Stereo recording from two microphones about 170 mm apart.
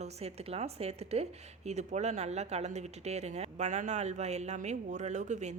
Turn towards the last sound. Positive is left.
turn(degrees=-45)  # may be behind; listen again after turning